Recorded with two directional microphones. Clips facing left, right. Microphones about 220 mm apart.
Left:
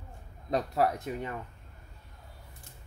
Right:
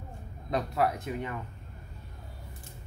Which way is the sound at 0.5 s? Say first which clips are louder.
Left 1 dB; 40° left (ahead or behind).